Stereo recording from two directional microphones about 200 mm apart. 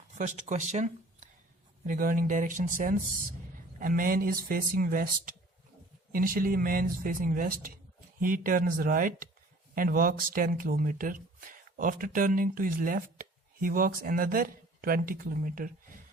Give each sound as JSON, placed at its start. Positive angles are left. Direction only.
{"t": 0.2, "sound": "speech", "side_deg": -35}